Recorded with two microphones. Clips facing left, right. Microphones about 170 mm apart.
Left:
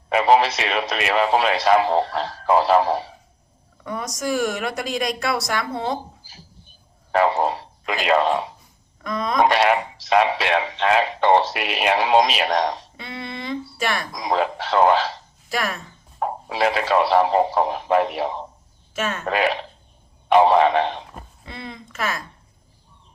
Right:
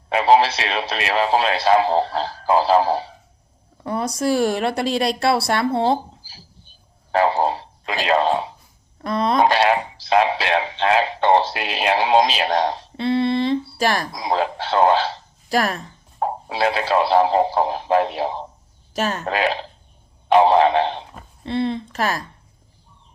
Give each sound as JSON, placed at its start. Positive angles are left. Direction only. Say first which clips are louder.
{"t": 0.2, "sound": "a woman's voice", "louder": "right 1 dB", "side_deg": -30}
{"t": 16.2, "sound": "a woman's voice", "louder": "right 1 dB", "side_deg": -25}